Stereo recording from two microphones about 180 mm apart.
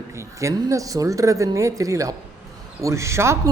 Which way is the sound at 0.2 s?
15° right (ahead or behind).